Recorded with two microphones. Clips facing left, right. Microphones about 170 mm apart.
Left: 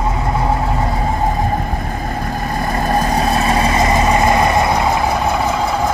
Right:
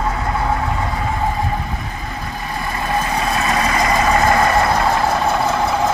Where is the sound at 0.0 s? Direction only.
20° left (ahead or behind).